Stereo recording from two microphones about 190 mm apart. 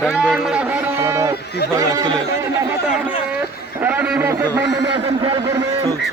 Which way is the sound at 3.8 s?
10° right (ahead or behind).